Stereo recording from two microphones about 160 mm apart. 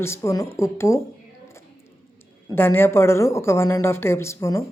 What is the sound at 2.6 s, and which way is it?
Speech, 15° left (ahead or behind).